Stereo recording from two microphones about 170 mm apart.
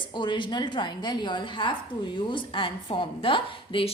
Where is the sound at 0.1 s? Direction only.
30° left (ahead or behind).